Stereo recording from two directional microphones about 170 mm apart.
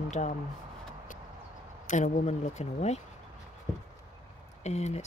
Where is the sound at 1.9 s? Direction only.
45° left (ahead or behind).